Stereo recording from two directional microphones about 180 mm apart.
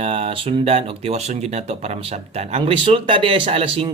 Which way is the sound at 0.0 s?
30° right (ahead or behind).